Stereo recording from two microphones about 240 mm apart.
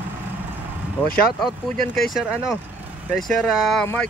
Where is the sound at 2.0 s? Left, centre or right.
Centre.